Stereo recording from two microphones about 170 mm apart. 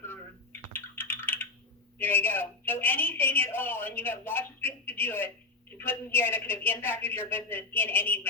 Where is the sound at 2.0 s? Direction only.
10° left (ahead or behind).